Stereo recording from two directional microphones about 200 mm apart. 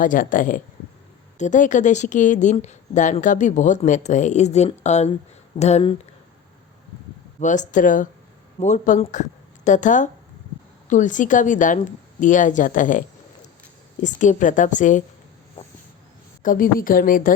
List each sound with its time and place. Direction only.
0.0 s a woman's voice: 40° left (ahead or behind)
7.3 s a woman's voice: 40° left (ahead or behind)
16.4 s a woman's voice: 45° left (ahead or behind)